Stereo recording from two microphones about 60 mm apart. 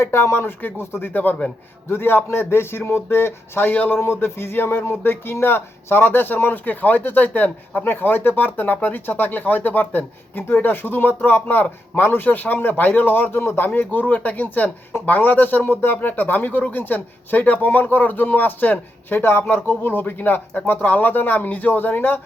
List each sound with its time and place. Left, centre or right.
0.0 s speech: left